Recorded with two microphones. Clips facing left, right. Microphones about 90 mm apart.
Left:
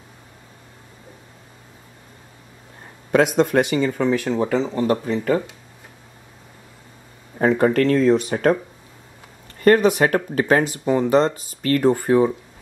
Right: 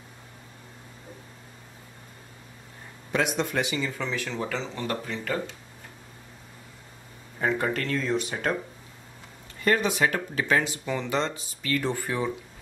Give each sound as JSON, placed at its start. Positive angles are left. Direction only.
{"t": 3.3, "sound": "speech", "side_deg": 55}
{"t": 7.3, "sound": "speech", "side_deg": 45}
{"t": 9.6, "sound": "speech", "side_deg": 50}